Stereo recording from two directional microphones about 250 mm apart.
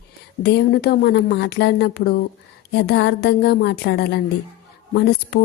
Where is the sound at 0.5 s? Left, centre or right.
Left.